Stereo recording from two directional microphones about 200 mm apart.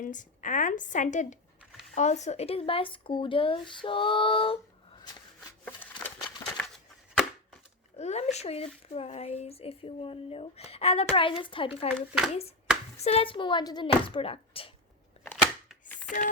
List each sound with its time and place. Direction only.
0.0 s a woman's voice: 40° left (ahead or behind)
5.8 s a sound: 10° left (ahead or behind)
6.4 s crumpling: 5° left (ahead or behind)
7.9 s speech: 35° left (ahead or behind)
11.9 s speech: centre (ahead or behind)
12.3 s speech: 30° left (ahead or behind)
15.7 s a sound: centre (ahead or behind)